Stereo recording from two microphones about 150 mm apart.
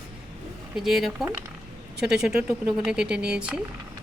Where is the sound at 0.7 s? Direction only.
Centre (ahead or behind).